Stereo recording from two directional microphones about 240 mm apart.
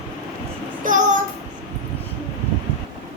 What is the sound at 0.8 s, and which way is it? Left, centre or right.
Child singing, right.